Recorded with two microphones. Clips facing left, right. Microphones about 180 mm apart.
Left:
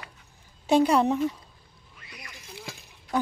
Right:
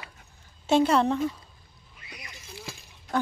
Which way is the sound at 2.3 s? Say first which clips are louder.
Left 1 dB; 15° left (ahead or behind).